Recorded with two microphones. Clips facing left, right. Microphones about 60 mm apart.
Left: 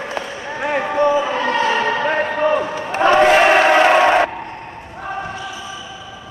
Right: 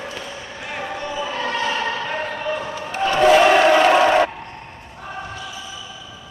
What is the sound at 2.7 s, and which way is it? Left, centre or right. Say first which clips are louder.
Crowd: left 4 dB; left.